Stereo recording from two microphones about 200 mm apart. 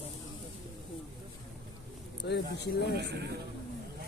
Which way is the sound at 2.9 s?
55° right (ahead or behind).